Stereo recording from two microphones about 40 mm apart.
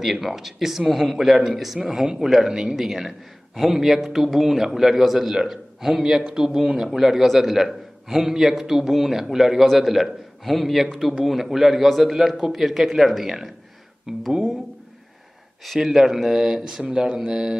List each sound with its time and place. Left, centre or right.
0.0 s a man's voice: centre
14.3 s a sound: centre
15.8 s a man's voice: centre